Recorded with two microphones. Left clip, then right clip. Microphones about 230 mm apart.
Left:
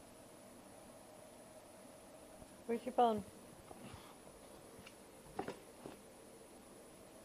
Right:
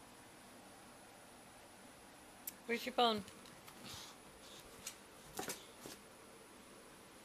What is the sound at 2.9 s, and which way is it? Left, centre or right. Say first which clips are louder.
Speech: left 1 dB; right.